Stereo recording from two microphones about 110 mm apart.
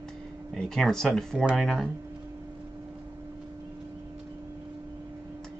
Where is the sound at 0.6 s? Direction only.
Centre (ahead or behind).